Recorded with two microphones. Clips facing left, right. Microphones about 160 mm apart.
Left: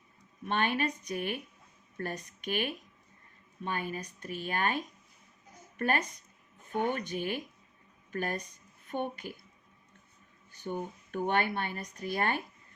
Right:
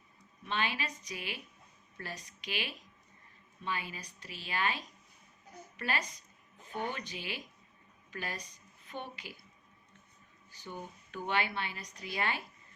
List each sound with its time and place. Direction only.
0.4 s speech: 55° left (ahead or behind)
10.5 s speech: 55° left (ahead or behind)